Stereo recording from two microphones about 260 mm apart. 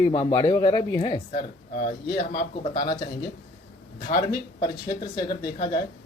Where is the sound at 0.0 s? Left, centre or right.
Centre.